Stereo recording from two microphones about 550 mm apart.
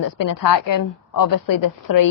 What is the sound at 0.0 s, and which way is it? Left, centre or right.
Speech, left.